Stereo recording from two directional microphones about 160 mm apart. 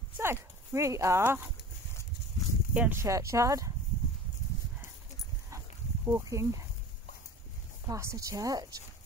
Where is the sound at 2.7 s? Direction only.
10° right (ahead or behind).